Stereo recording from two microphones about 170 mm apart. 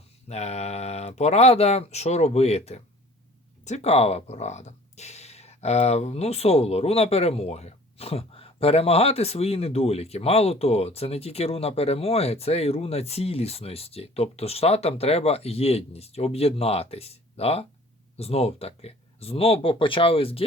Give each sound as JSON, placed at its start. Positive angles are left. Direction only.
{"t": 0.3, "sound": "speech", "side_deg": 40}